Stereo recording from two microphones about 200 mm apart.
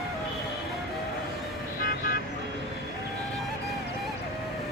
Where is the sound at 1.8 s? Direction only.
45° left (ahead or behind).